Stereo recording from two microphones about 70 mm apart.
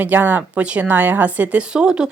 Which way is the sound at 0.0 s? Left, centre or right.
Right.